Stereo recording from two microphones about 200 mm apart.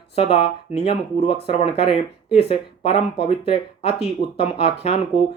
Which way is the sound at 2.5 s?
30° left (ahead or behind).